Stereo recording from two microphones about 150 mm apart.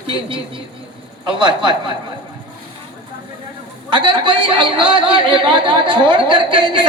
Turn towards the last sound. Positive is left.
turn(degrees=-30)  # may be behind; listen again after turning